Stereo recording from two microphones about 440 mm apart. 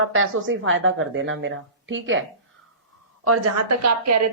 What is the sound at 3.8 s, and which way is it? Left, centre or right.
Speech, right.